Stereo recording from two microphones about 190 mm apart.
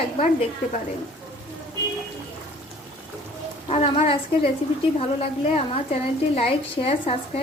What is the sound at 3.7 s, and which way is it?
Speech, 30° left (ahead or behind).